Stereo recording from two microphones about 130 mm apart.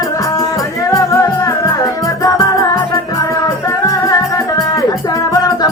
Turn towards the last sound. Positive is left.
turn(degrees=30)  # may be behind; listen again after turning